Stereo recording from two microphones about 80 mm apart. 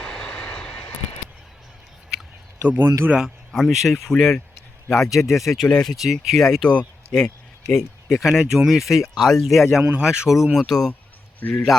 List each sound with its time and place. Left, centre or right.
0.0 s vehicle: centre
2.6 s speech: right
3.2 s speech: centre
8.2 s speech: centre
10.3 s speech: centre
11.3 s a man's voice: left